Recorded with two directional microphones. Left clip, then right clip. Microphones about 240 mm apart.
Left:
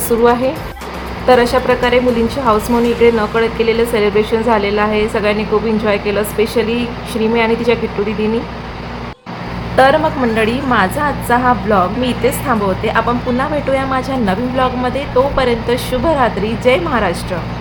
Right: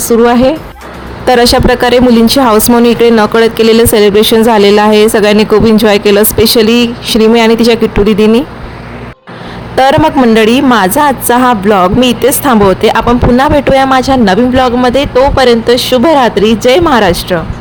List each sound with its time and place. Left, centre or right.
1.3 s a woman's voice: right
9.7 s a woman's voice: right